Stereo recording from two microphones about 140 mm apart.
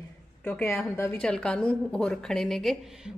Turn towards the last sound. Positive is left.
turn(degrees=-5)  # may be behind; listen again after turning